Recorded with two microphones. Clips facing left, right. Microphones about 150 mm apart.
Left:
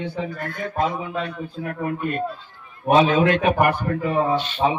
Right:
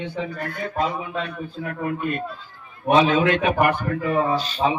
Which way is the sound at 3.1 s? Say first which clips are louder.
Left 1 dB; 45° left (ahead or behind).